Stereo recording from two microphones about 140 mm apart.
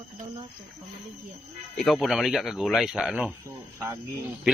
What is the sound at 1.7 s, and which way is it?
Speech, centre (ahead or behind).